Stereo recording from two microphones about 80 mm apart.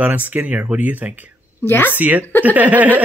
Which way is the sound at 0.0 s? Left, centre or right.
Right.